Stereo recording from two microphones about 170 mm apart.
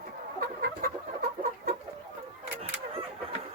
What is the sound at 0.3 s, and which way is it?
Chicken, 60° right (ahead or behind).